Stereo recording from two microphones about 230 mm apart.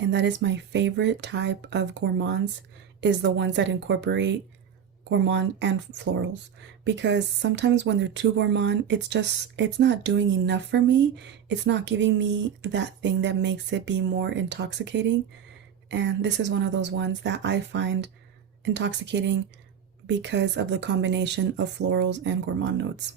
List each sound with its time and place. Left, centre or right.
0.0 s speech: right